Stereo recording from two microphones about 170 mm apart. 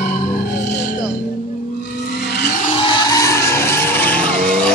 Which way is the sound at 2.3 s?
65° left (ahead or behind).